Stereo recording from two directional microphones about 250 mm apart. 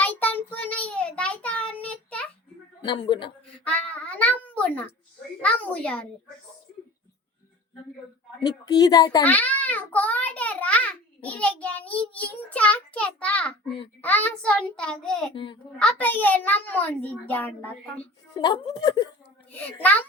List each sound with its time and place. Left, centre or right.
0.0 s child singing: centre
2.8 s a man's voice: centre
3.6 s a sound: centre
5.4 s a child's voice: centre
8.4 s a child's voice: centre
18.3 s a child's voice: centre
19.5 s a child's voice: centre